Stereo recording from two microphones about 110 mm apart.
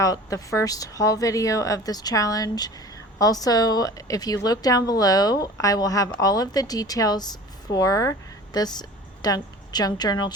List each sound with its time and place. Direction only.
0.0 s a woman's voice: 30° left (ahead or behind)